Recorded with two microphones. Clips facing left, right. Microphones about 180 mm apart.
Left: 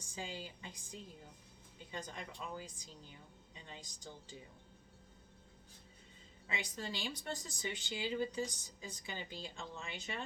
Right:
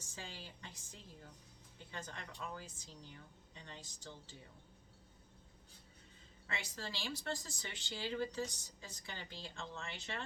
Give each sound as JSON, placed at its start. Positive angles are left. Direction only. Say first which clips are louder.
{"t": 0.1, "sound": "speech", "louder": "left 6 dB", "side_deg": 15}
{"t": 6.5, "sound": "speech", "louder": "left 3 dB", "side_deg": 15}